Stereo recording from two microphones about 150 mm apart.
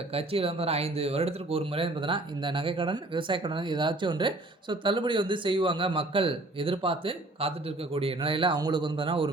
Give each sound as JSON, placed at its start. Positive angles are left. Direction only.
{"t": 0.1, "sound": "speech", "side_deg": -40}